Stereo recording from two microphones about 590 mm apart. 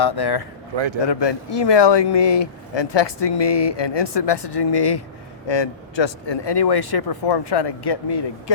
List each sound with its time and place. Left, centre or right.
0.0 s speech: left